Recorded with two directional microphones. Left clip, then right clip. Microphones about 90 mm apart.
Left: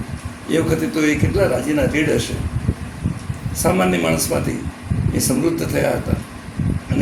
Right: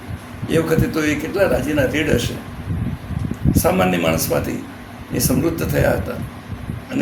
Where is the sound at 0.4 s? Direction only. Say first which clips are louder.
Right 1 dB; 10° right (ahead or behind).